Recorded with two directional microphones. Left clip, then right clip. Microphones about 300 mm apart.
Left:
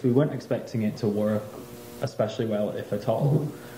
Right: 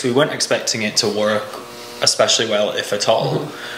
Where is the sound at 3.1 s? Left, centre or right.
Right.